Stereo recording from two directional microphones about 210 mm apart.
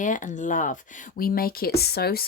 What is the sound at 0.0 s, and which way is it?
Speech, 35° left (ahead or behind).